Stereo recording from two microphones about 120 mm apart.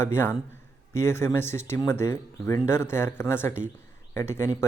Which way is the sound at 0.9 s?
20° left (ahead or behind).